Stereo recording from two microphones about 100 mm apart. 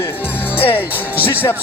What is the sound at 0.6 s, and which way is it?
Speech, 20° left (ahead or behind).